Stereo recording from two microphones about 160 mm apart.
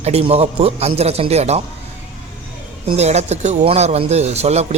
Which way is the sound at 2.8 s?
45° right (ahead or behind).